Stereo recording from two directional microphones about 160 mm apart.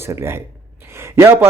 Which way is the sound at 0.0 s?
15° right (ahead or behind).